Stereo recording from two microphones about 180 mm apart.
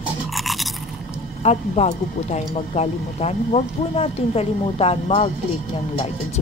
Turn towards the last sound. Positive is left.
turn(degrees=35)  # may be behind; listen again after turning